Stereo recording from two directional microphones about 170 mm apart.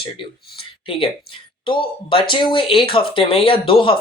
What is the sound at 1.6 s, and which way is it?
Speech, 30° left (ahead or behind).